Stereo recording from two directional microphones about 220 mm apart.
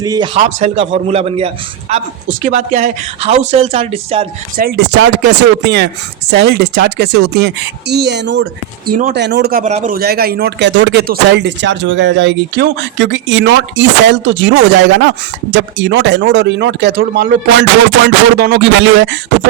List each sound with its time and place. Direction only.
0.0 s speech: 15° right (ahead or behind)
0.3 s a man's voice: 30° right (ahead or behind)
4.5 s a man's voice: 45° right (ahead or behind)
8.9 s a man's voice: 40° right (ahead or behind)